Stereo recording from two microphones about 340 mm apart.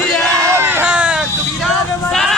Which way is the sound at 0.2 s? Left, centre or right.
Centre.